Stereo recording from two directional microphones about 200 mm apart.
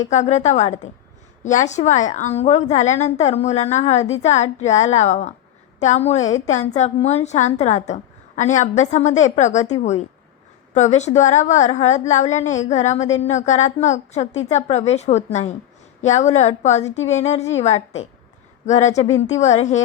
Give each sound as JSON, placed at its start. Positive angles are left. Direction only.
{"t": 0.0, "sound": "a woman's voice", "side_deg": 35}